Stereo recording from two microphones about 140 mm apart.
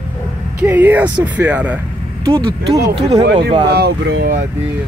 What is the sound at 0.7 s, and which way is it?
Speech, 15° right (ahead or behind).